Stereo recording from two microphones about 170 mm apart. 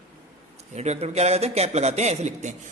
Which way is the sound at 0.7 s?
40° right (ahead or behind).